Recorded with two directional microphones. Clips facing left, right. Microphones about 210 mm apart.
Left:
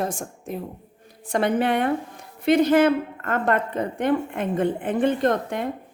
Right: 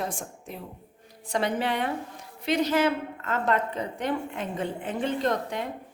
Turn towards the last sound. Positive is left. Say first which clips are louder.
# left 5 dB
turn(degrees=55)  # may be behind; listen again after turning